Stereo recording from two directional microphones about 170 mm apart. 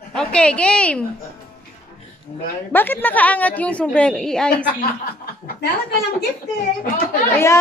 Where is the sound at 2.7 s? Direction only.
10° left (ahead or behind).